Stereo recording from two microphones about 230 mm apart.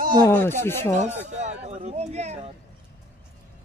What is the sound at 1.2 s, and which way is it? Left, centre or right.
Speech, right.